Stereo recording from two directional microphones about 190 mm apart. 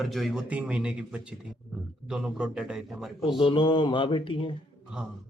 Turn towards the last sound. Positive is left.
turn(degrees=25)  # may be behind; listen again after turning